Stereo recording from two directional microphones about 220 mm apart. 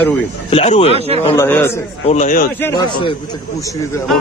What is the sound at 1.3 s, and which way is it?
Speech, 10° left (ahead or behind).